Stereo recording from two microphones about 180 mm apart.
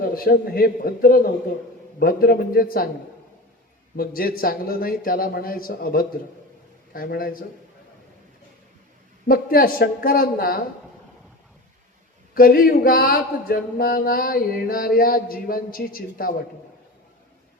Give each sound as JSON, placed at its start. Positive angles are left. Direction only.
{"t": 0.0, "sound": "a man's voice", "side_deg": 55}
{"t": 3.9, "sound": "a man's voice", "side_deg": 55}
{"t": 9.2, "sound": "a man's voice", "side_deg": 55}
{"t": 12.3, "sound": "a sound", "side_deg": 55}